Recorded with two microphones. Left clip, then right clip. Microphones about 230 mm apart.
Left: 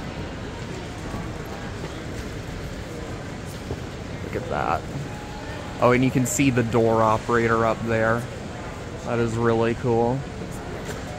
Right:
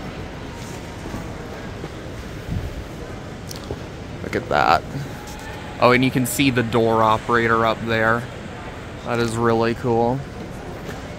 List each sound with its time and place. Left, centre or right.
4.5 s speech: right
5.8 s speech: centre